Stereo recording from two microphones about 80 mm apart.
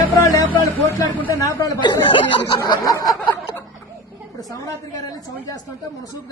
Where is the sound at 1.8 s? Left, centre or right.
Left.